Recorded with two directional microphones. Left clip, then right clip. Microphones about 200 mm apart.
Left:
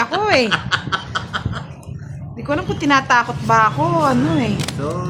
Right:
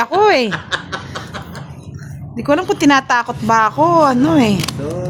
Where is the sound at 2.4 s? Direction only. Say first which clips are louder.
Right 7 dB; 55° right (ahead or behind).